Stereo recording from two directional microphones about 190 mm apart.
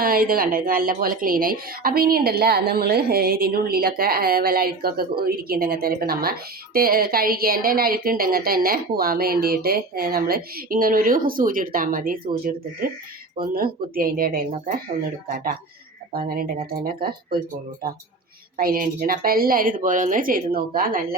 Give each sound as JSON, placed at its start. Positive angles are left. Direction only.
{"t": 0.0, "sound": "a woman's voice", "side_deg": -50}
{"t": 16.1, "sound": "a woman's voice", "side_deg": -50}
{"t": 18.5, "sound": "a woman's voice", "side_deg": -50}